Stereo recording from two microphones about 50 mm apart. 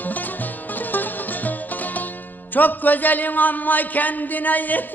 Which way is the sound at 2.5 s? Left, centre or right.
Left.